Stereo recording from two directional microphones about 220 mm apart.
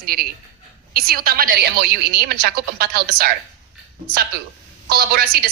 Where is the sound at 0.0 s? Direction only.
45° right (ahead or behind).